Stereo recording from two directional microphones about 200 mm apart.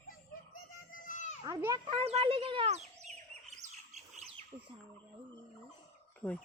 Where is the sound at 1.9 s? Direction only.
30° right (ahead or behind).